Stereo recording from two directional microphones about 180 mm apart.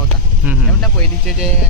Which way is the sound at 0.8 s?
Centre (ahead or behind).